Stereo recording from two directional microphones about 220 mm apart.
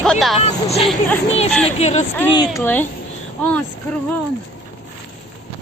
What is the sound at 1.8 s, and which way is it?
Speech, 30° left (ahead or behind).